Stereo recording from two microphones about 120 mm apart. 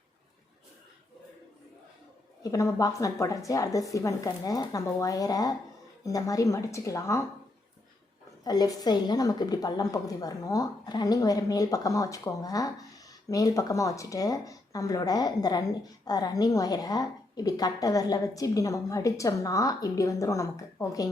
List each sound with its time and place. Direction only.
2.4 s speech: 30° left (ahead or behind)
8.4 s a woman's voice: 35° left (ahead or behind)